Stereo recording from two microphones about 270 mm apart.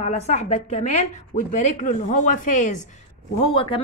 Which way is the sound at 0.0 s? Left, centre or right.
Left.